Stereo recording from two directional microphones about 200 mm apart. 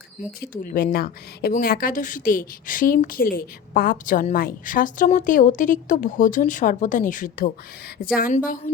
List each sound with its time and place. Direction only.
0.4 s speech: 45° left (ahead or behind)